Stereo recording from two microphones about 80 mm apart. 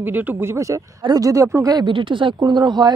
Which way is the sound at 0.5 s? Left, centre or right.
Right.